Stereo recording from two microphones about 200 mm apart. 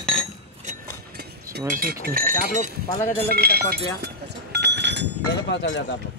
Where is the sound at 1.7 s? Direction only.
45° right (ahead or behind).